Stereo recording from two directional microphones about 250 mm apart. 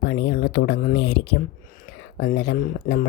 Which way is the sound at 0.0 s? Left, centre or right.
Left.